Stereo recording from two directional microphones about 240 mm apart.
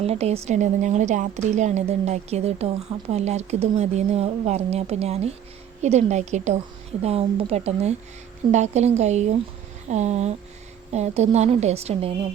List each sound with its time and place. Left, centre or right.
0.0 s a woman's voice: right